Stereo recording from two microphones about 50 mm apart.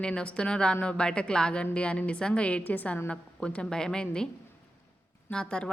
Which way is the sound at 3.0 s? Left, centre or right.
Left.